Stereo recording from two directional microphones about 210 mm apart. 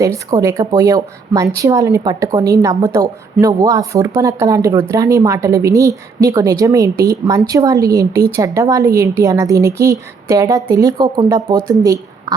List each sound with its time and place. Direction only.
0.0 s speech: 15° right (ahead or behind)